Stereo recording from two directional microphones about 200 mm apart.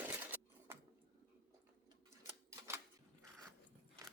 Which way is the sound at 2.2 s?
15° right (ahead or behind).